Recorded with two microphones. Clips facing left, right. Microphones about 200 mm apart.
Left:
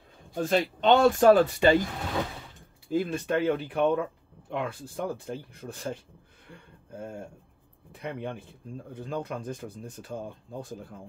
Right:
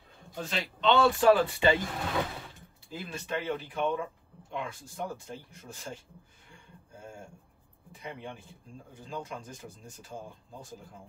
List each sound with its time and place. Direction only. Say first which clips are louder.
0.3 s speech: left 10 dB; 50° left (ahead or behind)
2.9 s speech: left 10 dB; 50° left (ahead or behind)
6.5 s a sound: left 8 dB; 60° left (ahead or behind)
7.9 s speech: left 7 dB; 60° left (ahead or behind)